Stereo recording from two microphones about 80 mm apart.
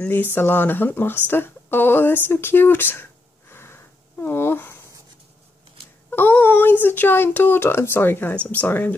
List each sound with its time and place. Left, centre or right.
0.0 s speech: left
6.0 s speech: left